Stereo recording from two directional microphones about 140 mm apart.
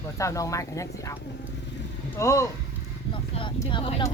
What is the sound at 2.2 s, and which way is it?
Speech, 20° left (ahead or behind).